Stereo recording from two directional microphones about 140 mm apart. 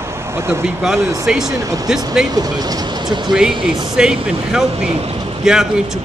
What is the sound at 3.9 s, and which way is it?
A man's voice, 5° right (ahead or behind).